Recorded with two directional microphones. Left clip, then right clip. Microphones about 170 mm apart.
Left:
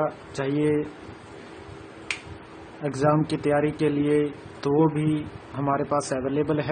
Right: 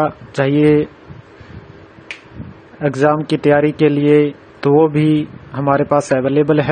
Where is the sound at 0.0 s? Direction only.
40° right (ahead or behind).